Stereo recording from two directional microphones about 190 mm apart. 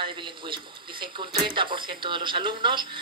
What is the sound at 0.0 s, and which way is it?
Speech, 25° right (ahead or behind).